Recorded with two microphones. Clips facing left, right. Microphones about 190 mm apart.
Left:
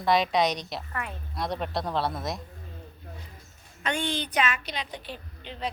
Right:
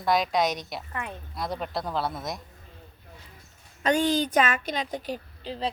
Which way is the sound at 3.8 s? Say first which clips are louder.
Right 7 dB; 40° right (ahead or behind).